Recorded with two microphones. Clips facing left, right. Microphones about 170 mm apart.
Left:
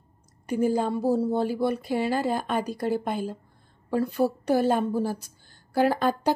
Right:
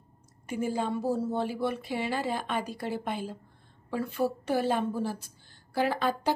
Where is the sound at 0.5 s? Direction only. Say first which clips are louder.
Left 6 dB; 40° left (ahead or behind).